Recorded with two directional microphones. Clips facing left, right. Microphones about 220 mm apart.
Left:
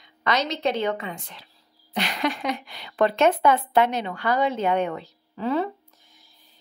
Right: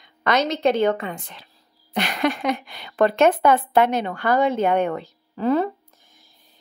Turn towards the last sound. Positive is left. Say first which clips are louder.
# right 5 dB
turn(degrees=-45)  # may be behind; listen again after turning